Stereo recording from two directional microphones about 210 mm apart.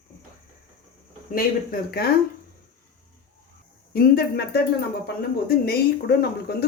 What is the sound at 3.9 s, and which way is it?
Speech, 50° left (ahead or behind).